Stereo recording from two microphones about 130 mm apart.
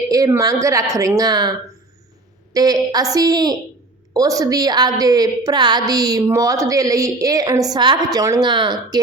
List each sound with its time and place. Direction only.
0.1 s a woman's voice: 25° right (ahead or behind)